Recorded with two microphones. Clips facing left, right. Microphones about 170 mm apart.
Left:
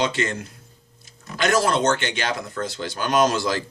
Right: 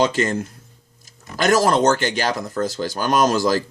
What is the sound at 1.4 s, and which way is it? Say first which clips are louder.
Speech: right 4 dB; 40° right (ahead or behind).